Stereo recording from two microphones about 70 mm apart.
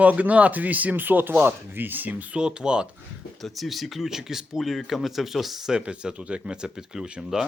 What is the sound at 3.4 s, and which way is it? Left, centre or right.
Speech, centre.